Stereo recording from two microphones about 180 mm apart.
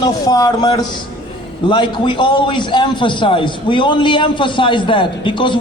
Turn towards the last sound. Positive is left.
turn(degrees=25)  # may be behind; listen again after turning